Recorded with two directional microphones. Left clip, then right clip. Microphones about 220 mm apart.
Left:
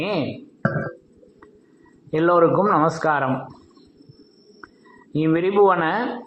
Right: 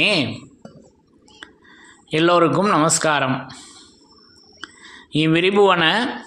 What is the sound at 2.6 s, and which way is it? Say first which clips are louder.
Speech: right 1 dB; 60° right (ahead or behind).